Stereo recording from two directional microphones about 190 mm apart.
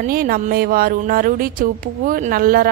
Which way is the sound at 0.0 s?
50° right (ahead or behind).